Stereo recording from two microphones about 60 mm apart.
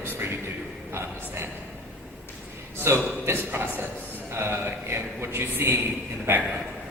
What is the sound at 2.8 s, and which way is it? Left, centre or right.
A man's voice, right.